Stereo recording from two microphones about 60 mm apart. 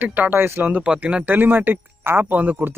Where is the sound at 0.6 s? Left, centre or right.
Right.